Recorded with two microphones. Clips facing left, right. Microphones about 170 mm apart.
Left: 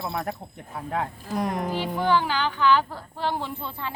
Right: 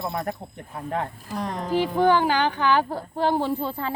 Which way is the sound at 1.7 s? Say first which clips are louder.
Right 6 dB; 45° right (ahead or behind).